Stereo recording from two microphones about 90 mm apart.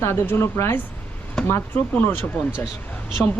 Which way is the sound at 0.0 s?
30° left (ahead or behind).